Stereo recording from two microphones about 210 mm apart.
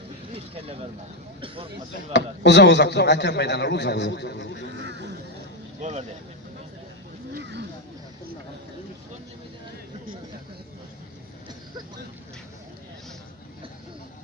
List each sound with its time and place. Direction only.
0.3 s vehicle: 25° right (ahead or behind)
1.4 s speech: 25° right (ahead or behind)
1.9 s a man's voice: 55° left (ahead or behind)
4.7 s speech: 55° right (ahead or behind)
5.8 s speech: 35° right (ahead or behind)
7.3 s speech: 55° right (ahead or behind)